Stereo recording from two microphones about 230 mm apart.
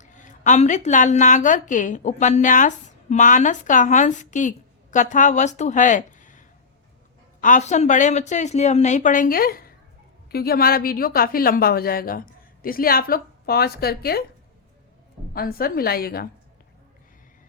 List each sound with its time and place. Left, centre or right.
0.0 s a woman's voice: left
7.4 s a woman's voice: left
15.3 s a woman's voice: left